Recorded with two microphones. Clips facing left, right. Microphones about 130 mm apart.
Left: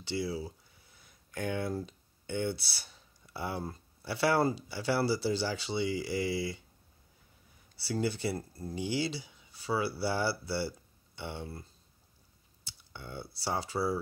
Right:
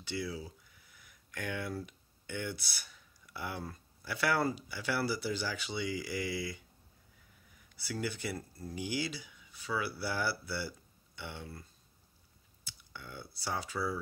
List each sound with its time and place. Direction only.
0.0 s speech: 30° left (ahead or behind)
12.9 s speech: 25° left (ahead or behind)